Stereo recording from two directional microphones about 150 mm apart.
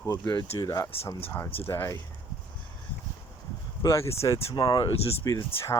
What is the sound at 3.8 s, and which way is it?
Speech, 20° left (ahead or behind).